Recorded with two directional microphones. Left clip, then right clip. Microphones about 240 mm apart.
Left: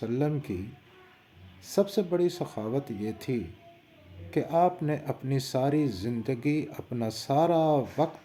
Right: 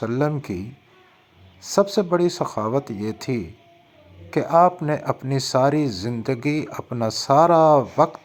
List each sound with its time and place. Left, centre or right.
0.0 s speech: centre
1.7 s speech: centre